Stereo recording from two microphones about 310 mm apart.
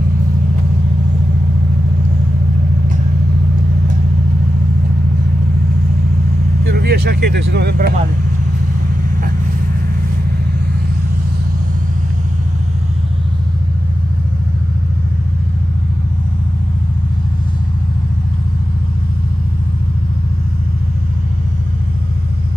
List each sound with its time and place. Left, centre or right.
6.6 s speech: right